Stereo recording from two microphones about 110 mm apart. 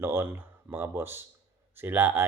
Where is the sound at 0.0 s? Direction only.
20° right (ahead or behind).